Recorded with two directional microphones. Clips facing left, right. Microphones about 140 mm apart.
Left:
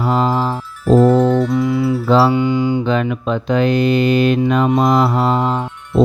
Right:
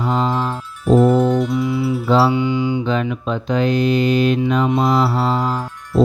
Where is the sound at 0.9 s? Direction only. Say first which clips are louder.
Left 2 dB; 90° left.